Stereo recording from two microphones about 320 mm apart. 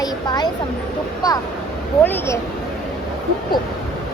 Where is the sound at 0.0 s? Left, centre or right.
Centre.